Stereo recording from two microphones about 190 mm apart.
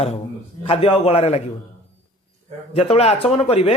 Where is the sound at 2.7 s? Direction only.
30° left (ahead or behind).